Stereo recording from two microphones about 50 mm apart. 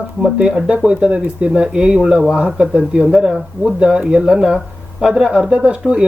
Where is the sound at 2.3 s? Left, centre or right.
Right.